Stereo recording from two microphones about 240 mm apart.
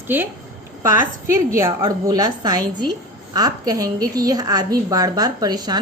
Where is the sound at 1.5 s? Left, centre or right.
Centre.